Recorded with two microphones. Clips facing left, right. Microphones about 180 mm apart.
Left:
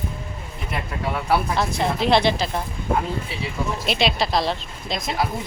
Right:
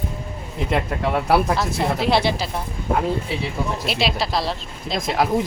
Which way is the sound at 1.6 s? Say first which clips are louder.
Even; 5° right (ahead or behind).